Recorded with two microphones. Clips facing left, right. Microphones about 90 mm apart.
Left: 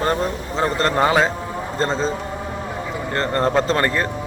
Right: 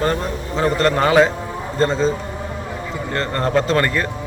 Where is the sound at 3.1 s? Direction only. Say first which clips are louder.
Even; 30° left (ahead or behind).